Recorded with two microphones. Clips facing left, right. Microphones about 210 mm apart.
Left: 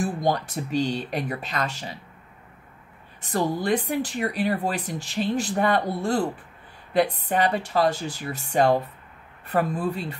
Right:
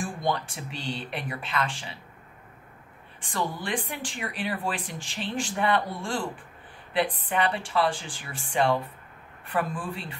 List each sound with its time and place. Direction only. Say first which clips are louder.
0.0 s speech: left 5 dB; 40° left (ahead or behind)
3.2 s speech: left 6 dB; 40° left (ahead or behind)